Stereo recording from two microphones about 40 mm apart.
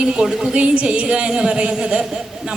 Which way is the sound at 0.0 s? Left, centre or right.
Right.